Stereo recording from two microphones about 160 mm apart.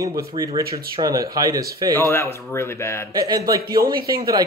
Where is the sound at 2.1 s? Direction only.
15° left (ahead or behind).